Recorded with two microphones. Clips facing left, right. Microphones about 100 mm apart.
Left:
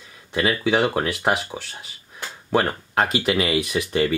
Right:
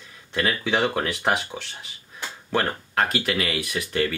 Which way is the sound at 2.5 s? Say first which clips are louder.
Left 3 dB; 15° left (ahead or behind).